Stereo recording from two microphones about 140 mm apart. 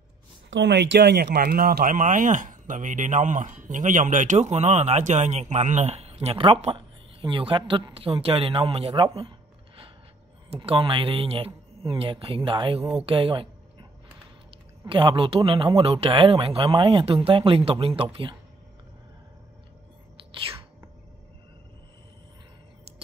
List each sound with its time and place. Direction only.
1.4 s speech: 90° right; by 9.3 s 35° right (ahead or behind)
10.5 s speech: 40° right (ahead or behind)
14.9 s speech: 35° right (ahead or behind)